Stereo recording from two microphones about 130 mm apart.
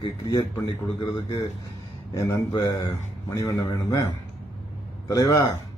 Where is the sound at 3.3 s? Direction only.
25° left (ahead or behind).